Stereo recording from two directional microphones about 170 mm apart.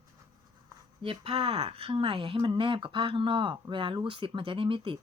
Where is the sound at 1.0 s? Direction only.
35° right (ahead or behind).